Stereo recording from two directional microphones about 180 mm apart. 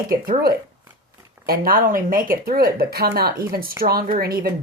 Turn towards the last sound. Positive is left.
turn(degrees=-55)  # may be behind; listen again after turning